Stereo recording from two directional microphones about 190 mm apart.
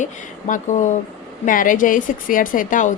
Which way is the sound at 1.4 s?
45° left (ahead or behind).